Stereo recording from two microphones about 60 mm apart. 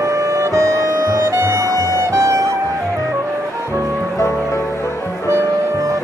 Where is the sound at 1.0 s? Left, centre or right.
Right.